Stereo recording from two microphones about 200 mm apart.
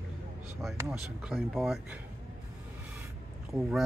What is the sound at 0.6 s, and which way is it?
Speech, centre (ahead or behind).